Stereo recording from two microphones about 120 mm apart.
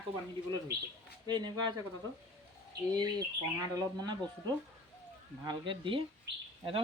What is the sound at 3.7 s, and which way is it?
Speech, 35° right (ahead or behind).